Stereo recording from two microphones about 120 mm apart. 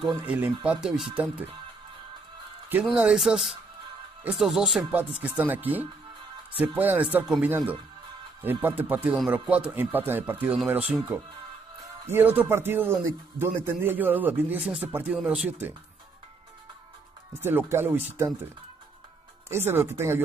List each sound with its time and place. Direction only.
0.2 s speech: 15° right (ahead or behind)
2.8 s speech: 5° right (ahead or behind)
5.2 s speech: 15° right (ahead or behind)
17.4 s speech: 20° right (ahead or behind)
19.5 s speech: 20° right (ahead or behind)